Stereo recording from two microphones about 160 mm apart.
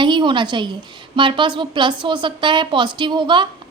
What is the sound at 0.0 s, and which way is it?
A woman's voice, 30° right (ahead or behind).